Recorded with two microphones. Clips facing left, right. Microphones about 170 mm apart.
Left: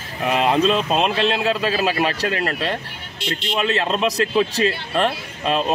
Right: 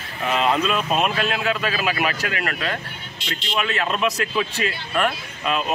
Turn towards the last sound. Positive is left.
turn(degrees=30)  # may be behind; listen again after turning